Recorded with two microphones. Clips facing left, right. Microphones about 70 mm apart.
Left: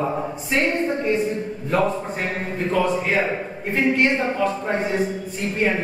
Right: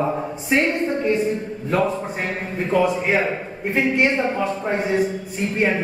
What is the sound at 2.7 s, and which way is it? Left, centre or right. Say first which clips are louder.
A man's voice: right 2 dB; centre.